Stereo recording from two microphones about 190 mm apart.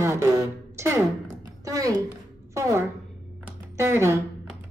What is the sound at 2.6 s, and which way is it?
A woman's voice, 15° right (ahead or behind).